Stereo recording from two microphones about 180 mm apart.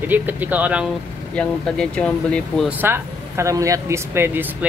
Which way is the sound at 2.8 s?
15° right (ahead or behind).